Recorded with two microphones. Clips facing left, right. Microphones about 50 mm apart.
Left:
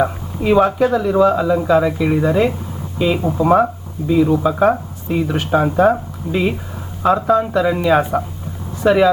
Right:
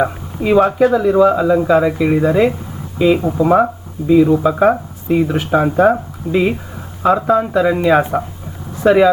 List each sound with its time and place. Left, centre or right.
0.0 s speech: centre
3.0 s speech: centre